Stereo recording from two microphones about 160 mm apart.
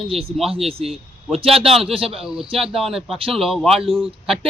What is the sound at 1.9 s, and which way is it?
Speech, 35° right (ahead or behind).